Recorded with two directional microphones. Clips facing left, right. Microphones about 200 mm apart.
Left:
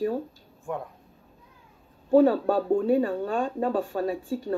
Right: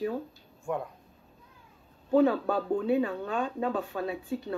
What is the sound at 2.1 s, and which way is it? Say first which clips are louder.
Speech: left 4 dB; 40° left (ahead or behind).